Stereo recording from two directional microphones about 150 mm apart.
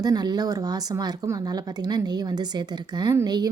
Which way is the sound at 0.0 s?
25° right (ahead or behind).